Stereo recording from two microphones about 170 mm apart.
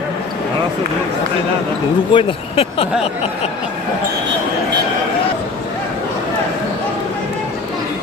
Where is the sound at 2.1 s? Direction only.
30° left (ahead or behind).